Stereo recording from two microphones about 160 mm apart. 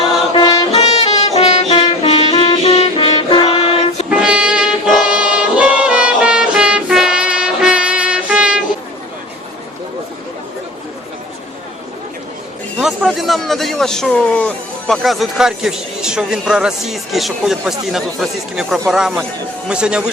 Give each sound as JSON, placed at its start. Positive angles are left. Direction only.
{"t": 0.3, "sound": "music", "side_deg": 20}
{"t": 0.7, "sound": "music", "side_deg": 40}
{"t": 4.1, "sound": "music", "side_deg": -5}
{"t": 12.8, "sound": "a man's voice", "side_deg": 0}